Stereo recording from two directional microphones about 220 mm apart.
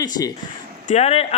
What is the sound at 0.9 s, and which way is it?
Speech, 30° left (ahead or behind).